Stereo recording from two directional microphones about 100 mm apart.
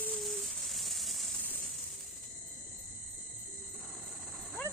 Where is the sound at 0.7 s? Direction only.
Centre (ahead or behind).